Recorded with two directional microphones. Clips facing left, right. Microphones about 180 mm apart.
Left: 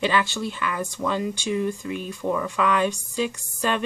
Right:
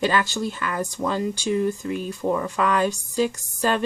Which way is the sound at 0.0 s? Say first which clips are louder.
Right 1 dB; 40° right (ahead or behind).